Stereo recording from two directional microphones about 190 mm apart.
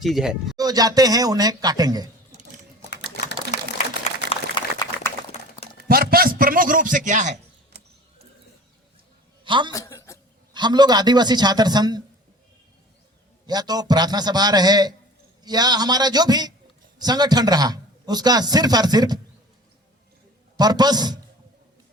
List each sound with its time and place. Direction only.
0.0 s speech: centre (ahead or behind)
0.5 s a man's voice: 20° right (ahead or behind)
3.2 s typewriter: 60° left (ahead or behind)
4.3 s a sound: 25° left (ahead or behind)
5.7 s a sound: 50° right (ahead or behind)
9.4 s a man's voice: 25° right (ahead or behind)
9.7 s speech: 15° left (ahead or behind)
10.5 s a man's voice: 25° right (ahead or behind)
13.5 s a man's voice: 20° right (ahead or behind)
20.6 s a man's voice: 20° right (ahead or behind)